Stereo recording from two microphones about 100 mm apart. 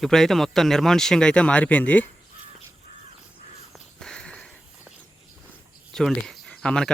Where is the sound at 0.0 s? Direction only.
5° left (ahead or behind).